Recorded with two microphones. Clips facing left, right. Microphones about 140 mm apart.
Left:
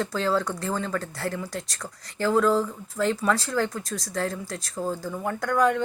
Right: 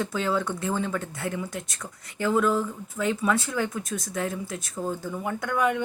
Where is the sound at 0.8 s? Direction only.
20° right (ahead or behind).